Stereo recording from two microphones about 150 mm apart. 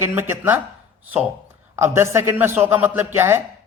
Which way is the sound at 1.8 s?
15° right (ahead or behind).